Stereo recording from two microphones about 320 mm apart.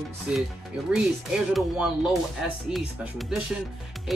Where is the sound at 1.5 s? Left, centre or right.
Centre.